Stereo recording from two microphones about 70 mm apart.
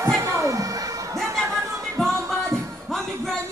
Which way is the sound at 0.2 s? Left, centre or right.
Right.